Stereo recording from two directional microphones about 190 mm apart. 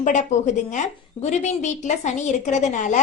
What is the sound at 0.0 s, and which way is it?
A woman's voice, 40° left (ahead or behind).